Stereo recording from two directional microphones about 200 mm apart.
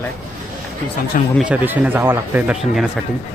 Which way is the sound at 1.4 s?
5° right (ahead or behind).